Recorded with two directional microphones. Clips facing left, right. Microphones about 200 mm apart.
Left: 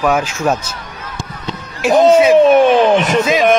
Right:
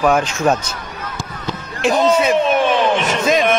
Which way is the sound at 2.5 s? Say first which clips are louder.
Left 6 dB; 40° left (ahead or behind).